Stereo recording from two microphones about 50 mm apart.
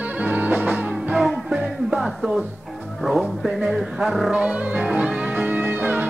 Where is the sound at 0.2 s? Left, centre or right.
Right.